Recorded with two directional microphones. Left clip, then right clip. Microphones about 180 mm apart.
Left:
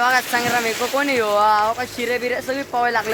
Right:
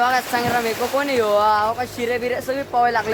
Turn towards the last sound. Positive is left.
turn(degrees=40)  # may be behind; listen again after turning